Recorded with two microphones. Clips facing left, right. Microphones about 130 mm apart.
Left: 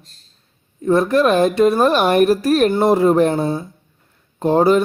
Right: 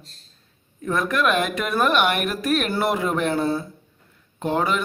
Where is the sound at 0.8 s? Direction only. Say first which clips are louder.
Left 8 dB; 30° left (ahead or behind).